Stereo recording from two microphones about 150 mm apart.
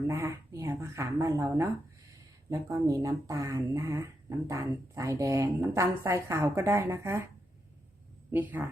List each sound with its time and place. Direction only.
0.1 s speech: 20° right (ahead or behind)
8.3 s speech: 10° right (ahead or behind)